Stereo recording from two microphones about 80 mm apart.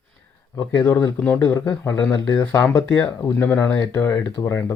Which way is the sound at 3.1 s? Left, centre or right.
Left.